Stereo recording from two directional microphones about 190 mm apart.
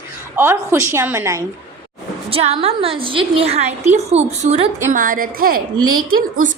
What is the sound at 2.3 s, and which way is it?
A woman's voice, 30° right (ahead or behind).